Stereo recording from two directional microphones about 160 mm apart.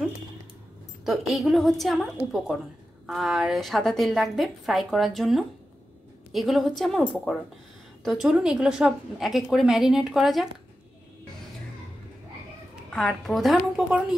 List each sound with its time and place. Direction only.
1.0 s a woman's voice: centre (ahead or behind)
12.9 s a woman's voice: 5° left (ahead or behind)